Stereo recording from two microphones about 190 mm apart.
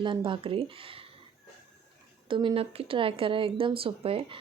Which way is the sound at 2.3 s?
25° right (ahead or behind).